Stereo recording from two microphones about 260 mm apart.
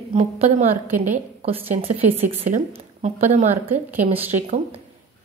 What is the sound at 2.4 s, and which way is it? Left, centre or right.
A woman's voice, right.